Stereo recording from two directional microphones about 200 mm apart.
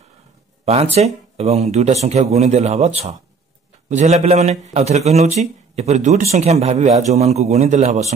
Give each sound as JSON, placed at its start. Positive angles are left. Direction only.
{"t": 0.9, "sound": "a man's voice", "side_deg": -30}